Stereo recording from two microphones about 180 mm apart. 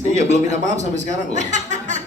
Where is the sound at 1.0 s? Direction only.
40° right (ahead or behind).